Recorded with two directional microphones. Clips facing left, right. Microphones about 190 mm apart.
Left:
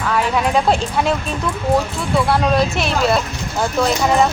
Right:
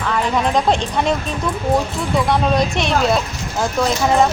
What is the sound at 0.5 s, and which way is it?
Speech, 5° left (ahead or behind).